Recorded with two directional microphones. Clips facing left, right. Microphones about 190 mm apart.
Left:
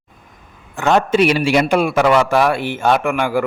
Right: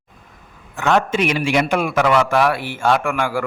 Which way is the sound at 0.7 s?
35° left (ahead or behind).